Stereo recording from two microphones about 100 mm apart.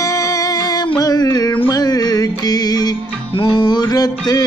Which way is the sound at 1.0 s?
40° left (ahead or behind).